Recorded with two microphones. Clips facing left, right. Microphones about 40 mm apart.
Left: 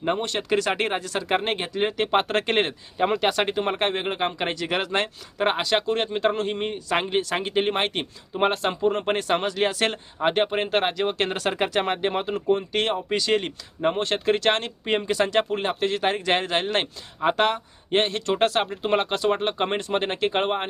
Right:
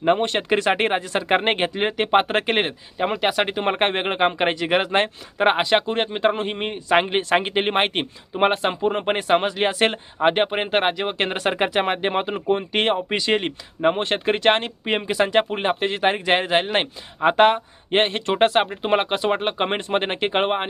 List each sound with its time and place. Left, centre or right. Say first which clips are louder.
0.0 s speech: right 6 dB; right; by 3.6 s centre
3.6 s speech: right 3 dB; right